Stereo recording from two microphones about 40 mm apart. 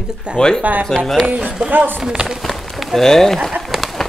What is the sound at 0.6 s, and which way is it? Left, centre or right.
Music, right.